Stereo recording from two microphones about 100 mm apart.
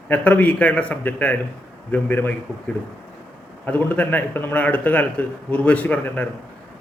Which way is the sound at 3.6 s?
15° left (ahead or behind).